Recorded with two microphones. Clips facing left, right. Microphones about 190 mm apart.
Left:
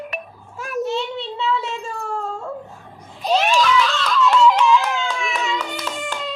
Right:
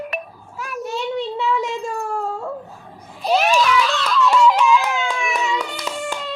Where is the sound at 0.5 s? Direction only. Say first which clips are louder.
Left 4 dB; 45° left (ahead or behind).